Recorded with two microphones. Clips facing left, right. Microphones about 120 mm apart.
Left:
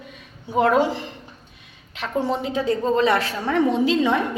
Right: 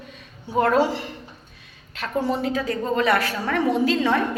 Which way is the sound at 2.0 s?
20° left (ahead or behind).